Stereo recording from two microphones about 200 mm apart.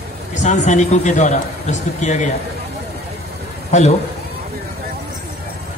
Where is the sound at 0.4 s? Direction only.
35° left (ahead or behind).